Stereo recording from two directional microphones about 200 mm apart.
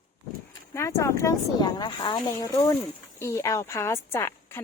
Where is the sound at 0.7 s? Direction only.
15° left (ahead or behind).